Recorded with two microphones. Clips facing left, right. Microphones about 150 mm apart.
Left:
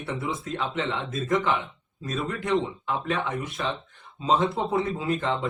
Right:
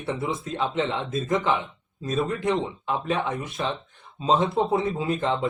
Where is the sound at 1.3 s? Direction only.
20° right (ahead or behind).